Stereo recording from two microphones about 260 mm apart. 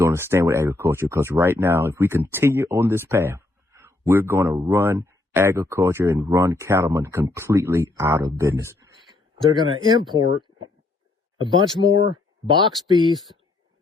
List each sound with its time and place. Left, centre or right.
0.0 s speech: centre
11.3 s speech: centre